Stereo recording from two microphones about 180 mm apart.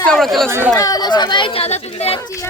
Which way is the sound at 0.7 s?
20° left (ahead or behind).